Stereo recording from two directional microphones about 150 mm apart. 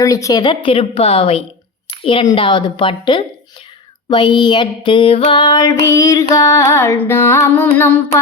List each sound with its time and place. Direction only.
0.0 s a woman's voice: 20° left (ahead or behind); by 1.5 s 40° left (ahead or behind)
1.9 s a sound: 35° left (ahead or behind)
2.2 s a woman's voice: 35° left (ahead or behind)
5.3 s female singing: 30° left (ahead or behind)
7.7 s child singing: 15° left (ahead or behind)